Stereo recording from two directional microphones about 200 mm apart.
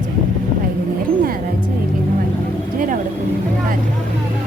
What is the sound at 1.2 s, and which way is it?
Music, 45° right (ahead or behind).